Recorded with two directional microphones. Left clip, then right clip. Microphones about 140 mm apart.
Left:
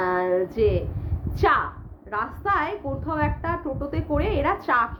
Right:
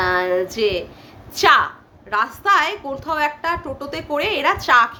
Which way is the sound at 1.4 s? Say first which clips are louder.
Right 7 dB; 15° right (ahead or behind).